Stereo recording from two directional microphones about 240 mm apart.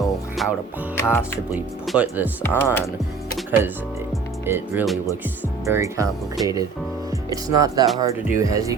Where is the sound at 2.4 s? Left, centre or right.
Centre.